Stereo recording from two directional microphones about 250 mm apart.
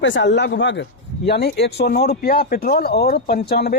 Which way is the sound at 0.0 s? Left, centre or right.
Left.